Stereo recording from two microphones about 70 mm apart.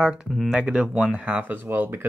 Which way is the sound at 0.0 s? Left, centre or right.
Centre.